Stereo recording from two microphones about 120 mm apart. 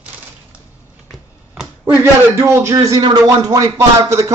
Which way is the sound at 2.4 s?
20° right (ahead or behind).